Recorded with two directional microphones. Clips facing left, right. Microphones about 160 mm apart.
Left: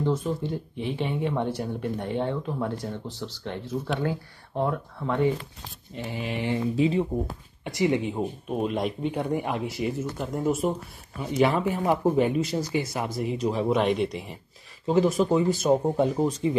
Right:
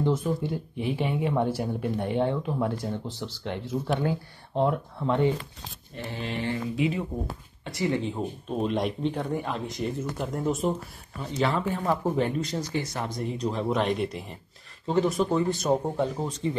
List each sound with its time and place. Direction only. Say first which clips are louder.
0.4 s speech: even; 10° right (ahead or behind)
5.9 s speech: left 2 dB; 15° left (ahead or behind)
6.8 s speech: left 4 dB; 30° left (ahead or behind)
7.6 s speech: left 3 dB; 20° left (ahead or behind)